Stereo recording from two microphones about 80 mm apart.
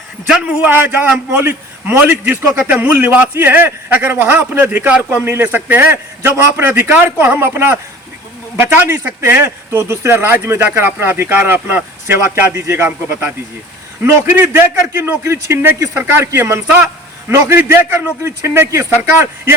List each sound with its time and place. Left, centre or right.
0.3 s a man's voice: centre
0.7 s a man's voice: right
9.0 s a man's voice: right